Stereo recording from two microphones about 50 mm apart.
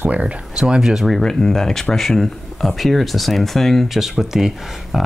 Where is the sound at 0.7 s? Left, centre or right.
Centre.